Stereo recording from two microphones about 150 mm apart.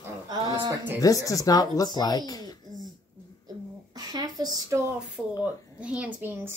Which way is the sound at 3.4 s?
25° right (ahead or behind).